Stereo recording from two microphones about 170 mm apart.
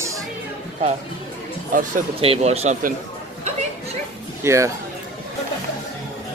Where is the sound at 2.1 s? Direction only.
35° right (ahead or behind).